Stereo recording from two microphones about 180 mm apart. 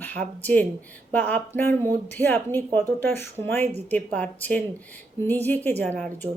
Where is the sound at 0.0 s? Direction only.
10° left (ahead or behind).